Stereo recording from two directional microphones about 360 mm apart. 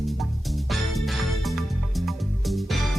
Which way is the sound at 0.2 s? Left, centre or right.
Centre.